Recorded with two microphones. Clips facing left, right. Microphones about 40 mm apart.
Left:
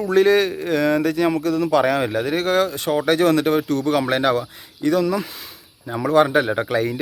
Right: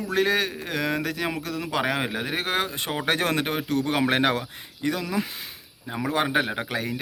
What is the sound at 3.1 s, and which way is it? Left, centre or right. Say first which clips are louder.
Speech: left 7 dB; right.